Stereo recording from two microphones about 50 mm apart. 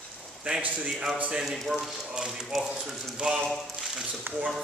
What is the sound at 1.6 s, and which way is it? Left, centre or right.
Speech, centre.